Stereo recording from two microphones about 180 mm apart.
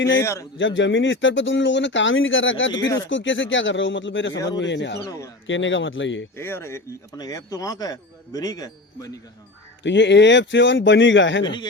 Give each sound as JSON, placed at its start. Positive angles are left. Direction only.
{"t": 0.2, "sound": "speech", "side_deg": 15}
{"t": 0.6, "sound": "speech", "side_deg": 90}
{"t": 5.0, "sound": "speech", "side_deg": 20}
{"t": 5.5, "sound": "speech", "side_deg": 90}
{"t": 6.3, "sound": "speech", "side_deg": 15}
{"t": 9.8, "sound": "speech", "side_deg": 75}
{"t": 11.4, "sound": "speech", "side_deg": 25}